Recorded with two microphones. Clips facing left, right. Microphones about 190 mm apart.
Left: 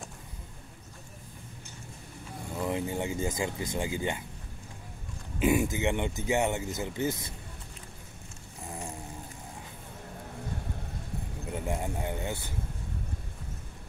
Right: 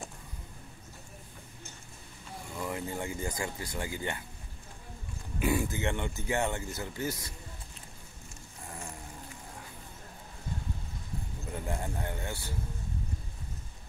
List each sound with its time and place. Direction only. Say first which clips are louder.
2.5 s speech: left 5 dB; 20° left (ahead or behind)
5.4 s speech: left 4 dB; 20° left (ahead or behind)
11.5 s vehicle: left 3 dB; 15° left (ahead or behind)